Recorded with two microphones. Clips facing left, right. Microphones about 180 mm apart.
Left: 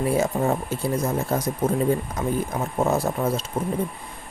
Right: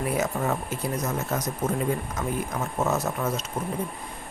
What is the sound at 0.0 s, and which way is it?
Speech, 30° left (ahead or behind).